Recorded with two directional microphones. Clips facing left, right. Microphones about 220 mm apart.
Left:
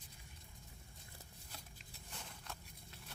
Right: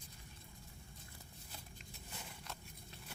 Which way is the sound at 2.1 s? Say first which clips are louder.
Right 1 dB; 5° right (ahead or behind).